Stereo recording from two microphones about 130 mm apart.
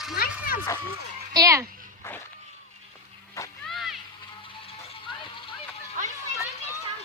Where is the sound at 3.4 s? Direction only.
20° left (ahead or behind).